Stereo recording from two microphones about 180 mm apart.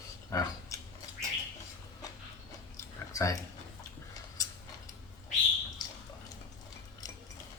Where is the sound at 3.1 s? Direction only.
15° left (ahead or behind).